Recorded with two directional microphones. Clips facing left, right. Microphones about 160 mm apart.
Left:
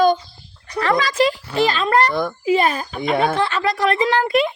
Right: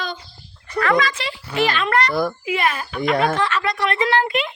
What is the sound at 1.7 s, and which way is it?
Speech, 30° left (ahead or behind).